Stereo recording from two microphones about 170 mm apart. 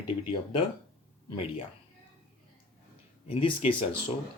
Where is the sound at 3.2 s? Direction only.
35° left (ahead or behind).